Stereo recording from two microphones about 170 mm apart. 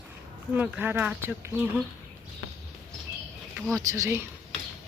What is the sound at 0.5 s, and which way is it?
Speech, 10° right (ahead or behind).